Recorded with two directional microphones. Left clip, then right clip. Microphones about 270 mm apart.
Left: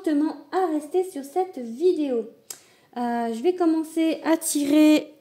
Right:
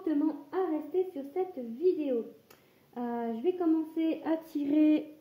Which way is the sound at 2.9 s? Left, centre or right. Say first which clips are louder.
Left 9 dB; left.